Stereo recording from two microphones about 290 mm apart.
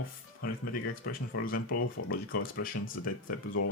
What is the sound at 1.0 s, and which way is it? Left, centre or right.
Speech, left.